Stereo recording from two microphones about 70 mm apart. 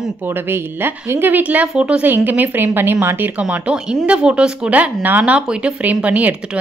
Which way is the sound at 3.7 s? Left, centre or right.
Centre.